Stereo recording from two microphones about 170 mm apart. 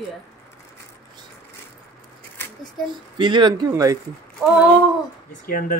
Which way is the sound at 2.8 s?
30° right (ahead or behind).